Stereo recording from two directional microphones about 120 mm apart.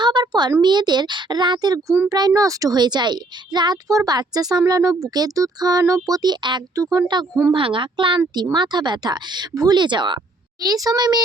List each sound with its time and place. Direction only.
0.0 s a sound: 40° right (ahead or behind)
0.6 s speech: 35° right (ahead or behind)
7.5 s speech: 45° right (ahead or behind)